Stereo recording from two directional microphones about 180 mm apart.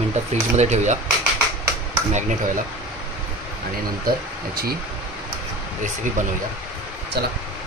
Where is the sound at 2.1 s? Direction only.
45° right (ahead or behind).